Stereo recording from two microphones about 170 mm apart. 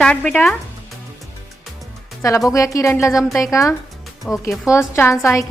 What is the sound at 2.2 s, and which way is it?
A woman's voice, 20° left (ahead or behind).